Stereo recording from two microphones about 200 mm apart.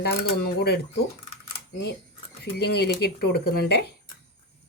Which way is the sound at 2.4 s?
55° left (ahead or behind).